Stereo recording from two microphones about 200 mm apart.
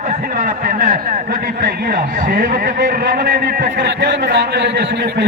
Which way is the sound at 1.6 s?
45° right (ahead or behind).